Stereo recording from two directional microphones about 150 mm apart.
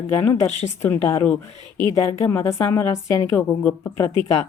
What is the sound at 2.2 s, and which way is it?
A woman's voice, 15° left (ahead or behind).